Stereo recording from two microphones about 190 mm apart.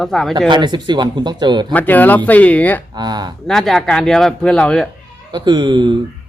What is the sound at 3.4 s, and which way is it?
Speech, centre (ahead or behind).